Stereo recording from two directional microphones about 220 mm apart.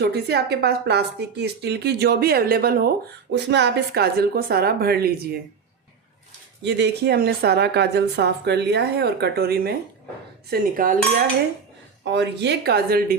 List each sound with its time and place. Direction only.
0.0 s speech: 45° right (ahead or behind)
6.6 s speech: 50° right (ahead or behind)
10.5 s cutlery: 40° right (ahead or behind)
12.1 s speech: 50° right (ahead or behind)